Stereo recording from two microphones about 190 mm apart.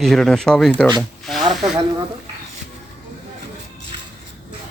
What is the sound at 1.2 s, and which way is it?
Snake, centre (ahead or behind).